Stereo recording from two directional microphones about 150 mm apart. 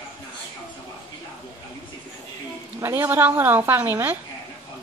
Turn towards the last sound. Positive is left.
turn(degrees=-15)  # may be behind; listen again after turning